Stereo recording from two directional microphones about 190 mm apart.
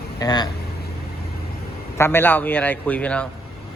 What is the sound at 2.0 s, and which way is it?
A man's voice, 10° left (ahead or behind).